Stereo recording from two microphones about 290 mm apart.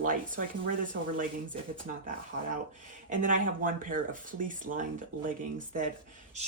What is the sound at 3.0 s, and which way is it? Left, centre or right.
Speech, right.